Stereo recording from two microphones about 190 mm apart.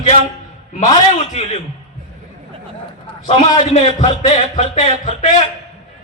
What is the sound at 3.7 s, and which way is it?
Speech, 40° left (ahead or behind).